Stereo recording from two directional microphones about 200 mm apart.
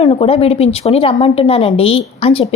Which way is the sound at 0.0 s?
30° left (ahead or behind).